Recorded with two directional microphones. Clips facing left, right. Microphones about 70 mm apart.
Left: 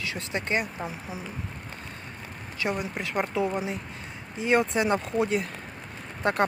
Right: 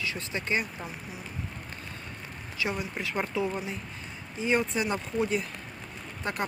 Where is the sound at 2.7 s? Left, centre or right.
Centre.